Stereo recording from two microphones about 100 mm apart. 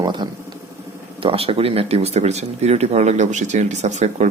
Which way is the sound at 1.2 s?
70° right (ahead or behind).